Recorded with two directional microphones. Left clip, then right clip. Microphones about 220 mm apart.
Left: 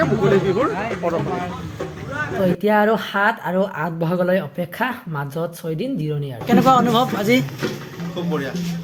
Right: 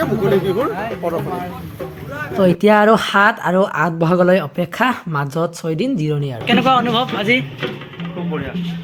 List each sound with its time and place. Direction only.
0.0 s speech: 15° right (ahead or behind)
2.1 s speech: 25° right (ahead or behind)
6.5 s speech: 5° left (ahead or behind)